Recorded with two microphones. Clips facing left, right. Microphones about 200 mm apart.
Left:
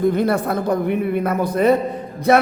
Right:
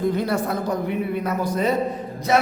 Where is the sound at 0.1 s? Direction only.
55° left (ahead or behind).